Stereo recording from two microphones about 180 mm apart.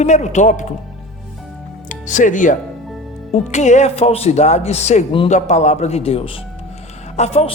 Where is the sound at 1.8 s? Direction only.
45° left (ahead or behind).